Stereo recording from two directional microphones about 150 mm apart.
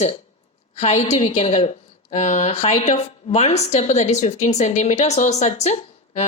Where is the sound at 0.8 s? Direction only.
50° left (ahead or behind).